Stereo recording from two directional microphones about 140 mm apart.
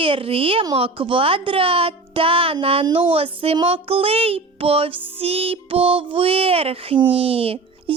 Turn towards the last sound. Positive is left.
turn(degrees=-45)  # may be behind; listen again after turning